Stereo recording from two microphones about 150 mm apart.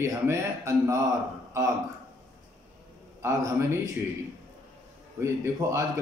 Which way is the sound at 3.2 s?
20° right (ahead or behind).